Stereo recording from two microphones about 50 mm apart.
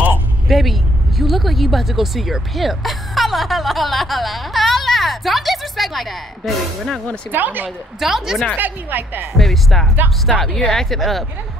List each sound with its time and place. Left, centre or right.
0.5 s speech: centre
7.2 s a woman's voice: right
8.0 s speech: centre
8.5 s a woman's voice: right
9.4 s speech: centre